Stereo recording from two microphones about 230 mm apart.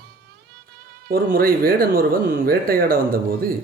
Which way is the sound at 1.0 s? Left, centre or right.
Right.